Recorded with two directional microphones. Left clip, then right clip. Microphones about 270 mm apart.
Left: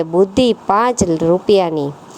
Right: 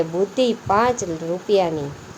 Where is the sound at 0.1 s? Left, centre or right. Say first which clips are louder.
Left 7 dB; left.